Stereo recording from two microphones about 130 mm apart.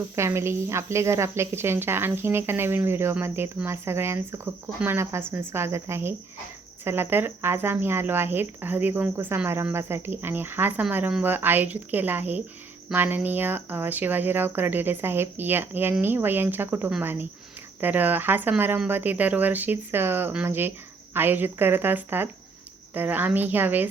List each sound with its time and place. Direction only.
0.2 s a woman's voice: 20° right (ahead or behind)